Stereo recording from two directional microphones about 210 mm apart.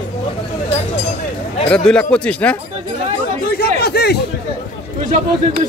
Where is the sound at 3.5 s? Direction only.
50° left (ahead or behind).